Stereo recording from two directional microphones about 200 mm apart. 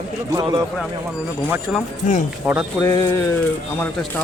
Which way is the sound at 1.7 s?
Centre (ahead or behind).